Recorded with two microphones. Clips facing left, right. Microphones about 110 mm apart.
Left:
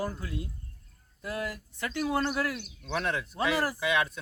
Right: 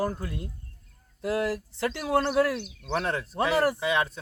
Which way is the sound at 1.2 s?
85° right.